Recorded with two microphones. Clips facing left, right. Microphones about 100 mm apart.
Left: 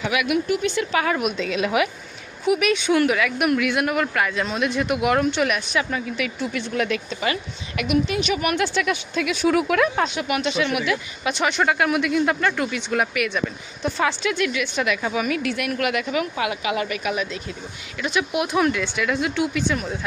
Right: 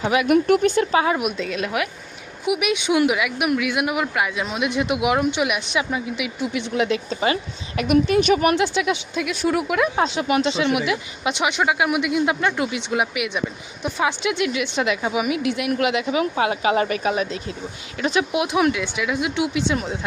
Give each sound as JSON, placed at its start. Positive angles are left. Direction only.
{"t": 0.0, "sound": "speech", "side_deg": -35}
{"t": 0.4, "sound": "a woman's voice", "side_deg": -50}
{"t": 0.9, "sound": "a woman's voice", "side_deg": -20}
{"t": 1.2, "sound": "speech", "side_deg": -5}
{"t": 2.5, "sound": "speech", "side_deg": -10}
{"t": 7.8, "sound": "a woman's voice", "side_deg": -45}
{"t": 8.5, "sound": "a woman's voice", "side_deg": -20}
{"t": 9.2, "sound": "speech", "side_deg": 0}
{"t": 9.9, "sound": "a woman's voice", "side_deg": -25}
{"t": 19.5, "sound": "a woman's voice", "side_deg": -25}